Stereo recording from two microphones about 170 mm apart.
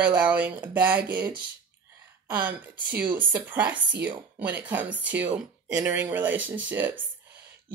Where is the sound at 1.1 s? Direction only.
25° right (ahead or behind).